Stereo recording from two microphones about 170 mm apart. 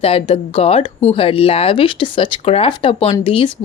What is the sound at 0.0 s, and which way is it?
A woman's voice, 35° left (ahead or behind).